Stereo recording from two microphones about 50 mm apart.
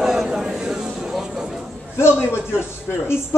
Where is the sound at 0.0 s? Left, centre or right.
Centre.